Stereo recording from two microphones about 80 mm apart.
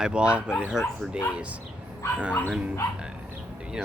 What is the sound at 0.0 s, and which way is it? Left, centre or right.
Speech, centre.